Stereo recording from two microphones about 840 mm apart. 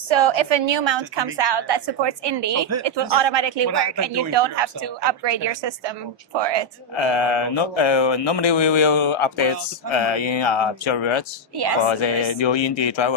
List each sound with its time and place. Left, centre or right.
0.1 s a woman's voice: right
2.6 s speech: centre
2.8 s a woman's voice: right
6.9 s speech: left
11.5 s a woman's voice: right
11.9 s speech: left